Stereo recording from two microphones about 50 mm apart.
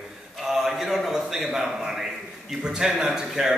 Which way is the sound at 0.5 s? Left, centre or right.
Centre.